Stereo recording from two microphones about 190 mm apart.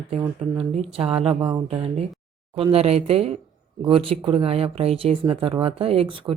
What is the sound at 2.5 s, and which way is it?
Speech, 30° right (ahead or behind).